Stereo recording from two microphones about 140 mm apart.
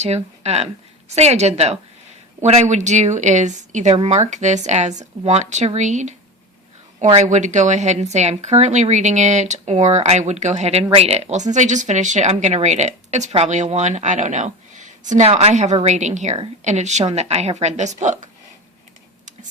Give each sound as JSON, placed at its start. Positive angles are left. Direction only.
{"t": 0.0, "sound": "a woman's voice", "side_deg": -50}